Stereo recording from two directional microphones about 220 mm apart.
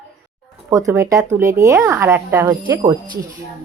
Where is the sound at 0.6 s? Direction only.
15° right (ahead or behind).